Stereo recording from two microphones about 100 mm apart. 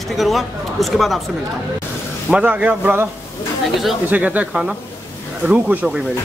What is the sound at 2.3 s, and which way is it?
Speech, 15° right (ahead or behind).